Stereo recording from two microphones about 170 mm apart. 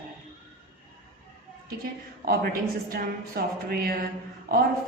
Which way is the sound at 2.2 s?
65° right (ahead or behind).